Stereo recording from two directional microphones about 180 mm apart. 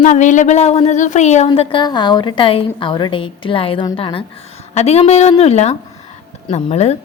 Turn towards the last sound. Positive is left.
turn(degrees=35)  # may be behind; listen again after turning